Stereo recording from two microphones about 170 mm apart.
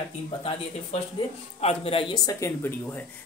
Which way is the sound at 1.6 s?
35° left (ahead or behind).